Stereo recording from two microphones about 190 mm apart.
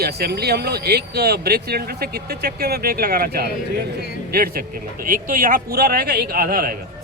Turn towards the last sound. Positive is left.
turn(degrees=-50)  # may be behind; listen again after turning